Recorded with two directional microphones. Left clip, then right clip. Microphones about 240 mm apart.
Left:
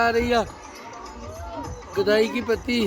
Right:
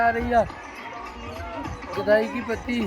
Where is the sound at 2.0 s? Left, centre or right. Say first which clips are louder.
Even; centre.